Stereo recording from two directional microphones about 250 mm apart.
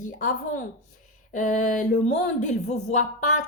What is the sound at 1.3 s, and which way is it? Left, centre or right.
A woman's voice, left.